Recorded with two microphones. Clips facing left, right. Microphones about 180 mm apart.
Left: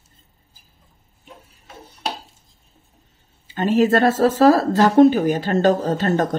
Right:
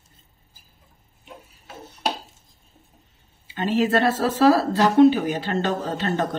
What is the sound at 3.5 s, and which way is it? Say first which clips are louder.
Speech: left 4 dB; 45° left (ahead or behind).